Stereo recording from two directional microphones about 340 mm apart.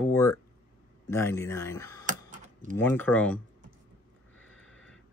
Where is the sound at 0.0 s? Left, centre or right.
Centre.